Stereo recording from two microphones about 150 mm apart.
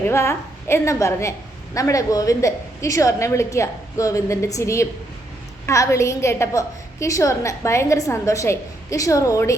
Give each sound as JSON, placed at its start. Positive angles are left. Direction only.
{"t": 0.1, "sound": "a woman's voice", "side_deg": 15}